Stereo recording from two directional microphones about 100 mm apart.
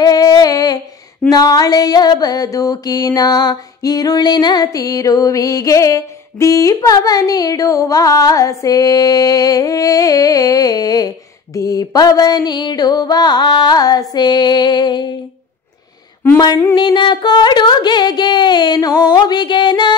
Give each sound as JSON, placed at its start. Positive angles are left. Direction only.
{"t": 0.0, "sound": "humming", "side_deg": 40}
{"t": 1.3, "sound": "mantra", "side_deg": 40}
{"t": 16.7, "sound": "a sound", "side_deg": 50}